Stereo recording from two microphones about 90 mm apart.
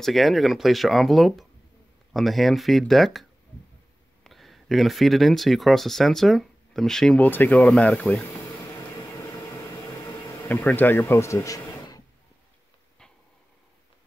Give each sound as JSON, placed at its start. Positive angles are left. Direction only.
{"t": 0.0, "sound": "speech", "side_deg": 0}
{"t": 7.2, "sound": "speech", "side_deg": 20}
{"t": 10.5, "sound": "speech", "side_deg": 15}